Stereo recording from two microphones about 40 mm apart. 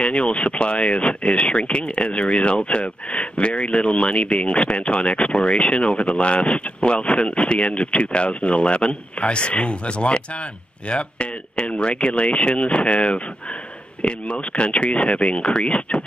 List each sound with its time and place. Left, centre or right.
0.0 s speech: left